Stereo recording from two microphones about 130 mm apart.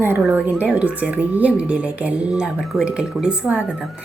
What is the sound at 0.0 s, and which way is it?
A woman's voice, 15° right (ahead or behind).